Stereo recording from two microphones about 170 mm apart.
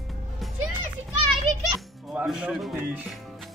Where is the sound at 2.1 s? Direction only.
5° right (ahead or behind).